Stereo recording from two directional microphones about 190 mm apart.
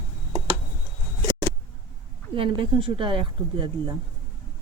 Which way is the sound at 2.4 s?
25° right (ahead or behind).